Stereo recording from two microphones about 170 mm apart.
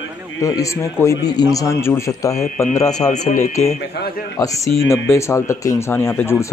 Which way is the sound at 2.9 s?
45° left (ahead or behind).